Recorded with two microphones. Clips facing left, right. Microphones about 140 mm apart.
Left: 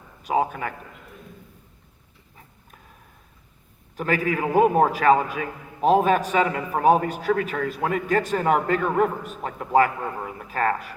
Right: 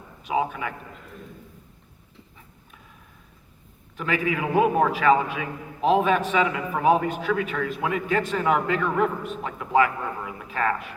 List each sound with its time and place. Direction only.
0.3 s a man's voice: 45° left (ahead or behind)
3.9 s a man's voice: 40° left (ahead or behind)